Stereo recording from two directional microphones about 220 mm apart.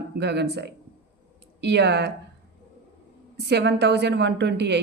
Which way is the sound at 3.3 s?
50° right (ahead or behind).